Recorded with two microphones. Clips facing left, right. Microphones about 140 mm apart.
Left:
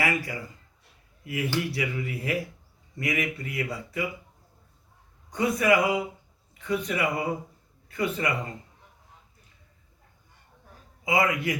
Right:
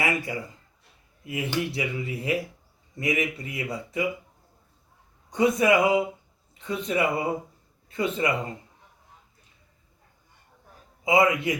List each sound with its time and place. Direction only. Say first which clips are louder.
0.0 s speech: right 1 dB; 20° right (ahead or behind)
5.3 s a man's voice: right 2 dB; 20° right (ahead or behind)
11.0 s speech: right 4 dB; 25° right (ahead or behind)